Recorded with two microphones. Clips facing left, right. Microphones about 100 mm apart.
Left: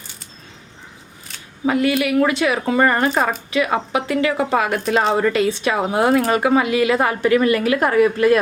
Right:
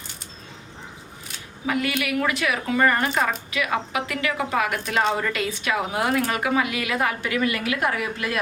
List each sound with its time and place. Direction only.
1.6 s speech: 30° left (ahead or behind)